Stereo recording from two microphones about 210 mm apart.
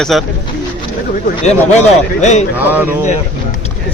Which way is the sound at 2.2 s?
35° left (ahead or behind).